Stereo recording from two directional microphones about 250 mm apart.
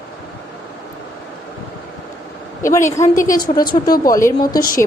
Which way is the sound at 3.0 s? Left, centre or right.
Left.